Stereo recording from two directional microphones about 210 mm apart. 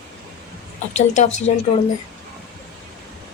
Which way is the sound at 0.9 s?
35° left (ahead or behind).